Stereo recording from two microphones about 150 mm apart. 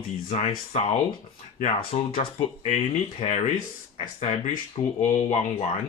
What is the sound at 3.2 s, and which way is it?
Speech, 55° left (ahead or behind).